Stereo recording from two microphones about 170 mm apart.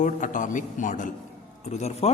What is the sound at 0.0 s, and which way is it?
A man's voice, 50° left (ahead or behind).